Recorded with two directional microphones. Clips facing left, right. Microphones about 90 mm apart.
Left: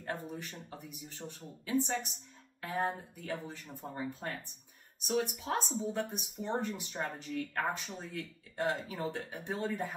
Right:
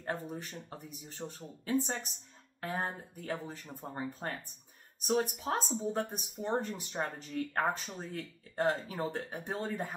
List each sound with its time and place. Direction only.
0.0 s speech: 35° right (ahead or behind)